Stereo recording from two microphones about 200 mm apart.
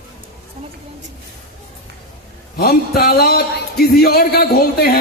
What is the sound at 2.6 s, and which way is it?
A man's voice, 50° left (ahead or behind).